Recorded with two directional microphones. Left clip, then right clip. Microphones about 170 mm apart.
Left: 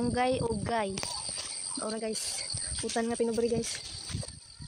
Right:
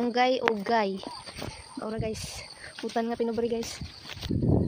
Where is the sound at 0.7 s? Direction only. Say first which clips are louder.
Right 5 dB; 35° right (ahead or behind).